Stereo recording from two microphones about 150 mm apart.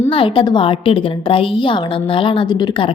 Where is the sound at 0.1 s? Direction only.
35° left (ahead or behind).